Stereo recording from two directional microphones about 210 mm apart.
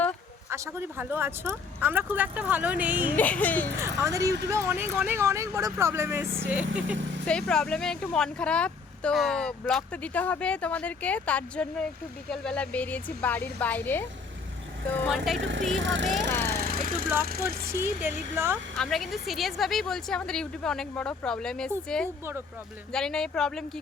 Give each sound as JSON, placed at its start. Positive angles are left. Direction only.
{"t": 0.5, "sound": "speech", "side_deg": -10}
{"t": 2.9, "sound": "speech", "side_deg": -40}
{"t": 3.2, "sound": "speech", "side_deg": 5}
{"t": 3.8, "sound": "speech", "side_deg": -15}
{"t": 15.4, "sound": "speech", "side_deg": -60}
{"t": 16.5, "sound": "a sound", "side_deg": -45}
{"t": 17.7, "sound": "speech", "side_deg": -10}
{"t": 18.8, "sound": "speech", "side_deg": 0}